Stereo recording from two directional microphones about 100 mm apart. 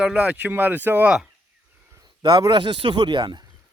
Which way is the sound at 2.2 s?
45° right (ahead or behind).